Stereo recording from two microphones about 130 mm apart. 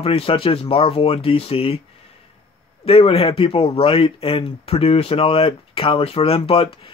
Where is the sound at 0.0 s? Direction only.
45° left (ahead or behind).